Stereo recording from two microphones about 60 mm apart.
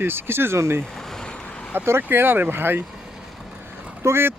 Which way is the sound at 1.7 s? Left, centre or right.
Right.